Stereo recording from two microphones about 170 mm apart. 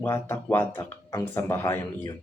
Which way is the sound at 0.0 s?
10° left (ahead or behind).